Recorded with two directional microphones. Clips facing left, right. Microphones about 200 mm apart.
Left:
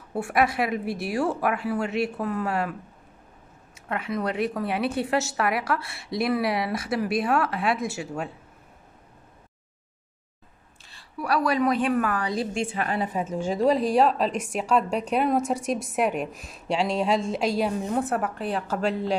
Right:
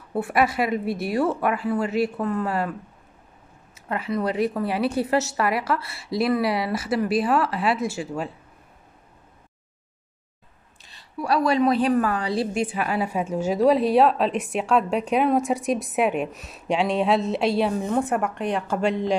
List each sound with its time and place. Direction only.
0.1 s a woman's voice: centre (ahead or behind)
3.7 s a woman's voice: centre (ahead or behind)
10.8 s a woman's voice: 20° right (ahead or behind)
12.7 s a woman's voice: 10° right (ahead or behind)